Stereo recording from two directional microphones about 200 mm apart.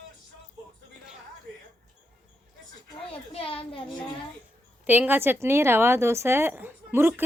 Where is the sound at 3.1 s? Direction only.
30° left (ahead or behind).